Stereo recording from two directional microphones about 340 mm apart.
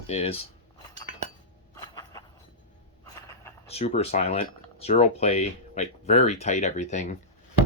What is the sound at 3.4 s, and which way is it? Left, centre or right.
Speech, centre.